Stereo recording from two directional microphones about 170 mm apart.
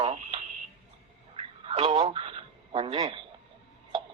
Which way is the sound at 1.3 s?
35° right (ahead or behind).